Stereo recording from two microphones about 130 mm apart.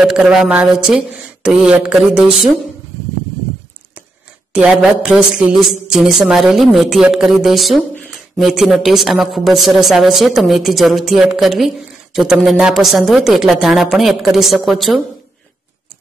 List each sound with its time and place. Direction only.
0.0 s speech: 5° right (ahead or behind)
4.5 s speech: 10° right (ahead or behind)